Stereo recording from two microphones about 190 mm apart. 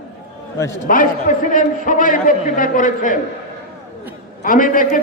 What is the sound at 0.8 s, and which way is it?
A man's voice, 45° left (ahead or behind).